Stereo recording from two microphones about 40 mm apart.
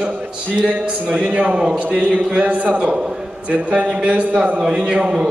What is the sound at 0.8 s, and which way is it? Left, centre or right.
A man's voice, right.